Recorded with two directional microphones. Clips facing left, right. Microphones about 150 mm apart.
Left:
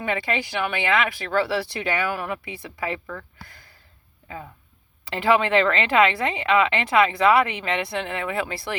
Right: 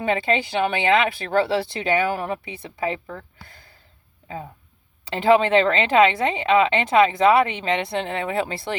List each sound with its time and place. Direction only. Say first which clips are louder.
0.0 s speech: right 4 dB; 25° right (ahead or behind)
5.0 s speech: right 3 dB; 25° right (ahead or behind)